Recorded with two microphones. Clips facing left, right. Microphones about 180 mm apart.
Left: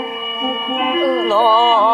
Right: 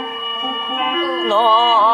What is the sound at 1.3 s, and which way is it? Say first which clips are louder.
Speech: right 2 dB; 5° left (ahead or behind).